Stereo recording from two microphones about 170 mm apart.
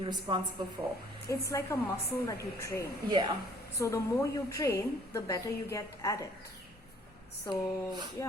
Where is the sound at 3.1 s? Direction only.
25° right (ahead or behind).